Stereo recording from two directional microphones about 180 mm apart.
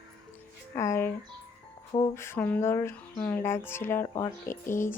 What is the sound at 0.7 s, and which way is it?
Speech, 15° left (ahead or behind).